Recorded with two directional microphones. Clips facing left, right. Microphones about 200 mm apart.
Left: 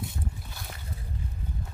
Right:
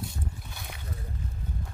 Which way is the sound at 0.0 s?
Centre (ahead or behind).